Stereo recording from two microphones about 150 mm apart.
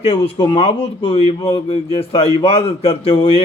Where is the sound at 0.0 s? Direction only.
35° left (ahead or behind).